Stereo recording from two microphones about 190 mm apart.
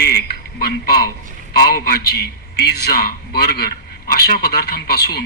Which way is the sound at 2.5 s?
60° left (ahead or behind).